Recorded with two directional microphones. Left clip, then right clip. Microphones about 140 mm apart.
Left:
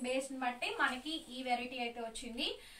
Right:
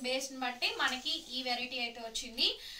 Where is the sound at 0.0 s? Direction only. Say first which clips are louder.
Right 1 dB; 5° left (ahead or behind).